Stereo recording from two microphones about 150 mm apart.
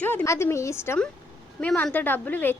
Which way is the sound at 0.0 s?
15° left (ahead or behind).